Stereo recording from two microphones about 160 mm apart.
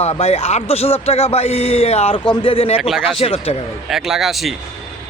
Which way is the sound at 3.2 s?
35° left (ahead or behind).